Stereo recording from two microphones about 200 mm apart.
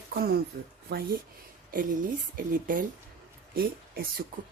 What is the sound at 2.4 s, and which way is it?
A woman's voice, 45° right (ahead or behind).